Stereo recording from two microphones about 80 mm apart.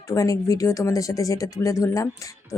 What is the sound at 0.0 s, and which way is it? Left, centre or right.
Speech, left.